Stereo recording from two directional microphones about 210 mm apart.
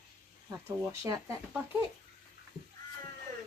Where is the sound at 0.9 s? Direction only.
15° right (ahead or behind).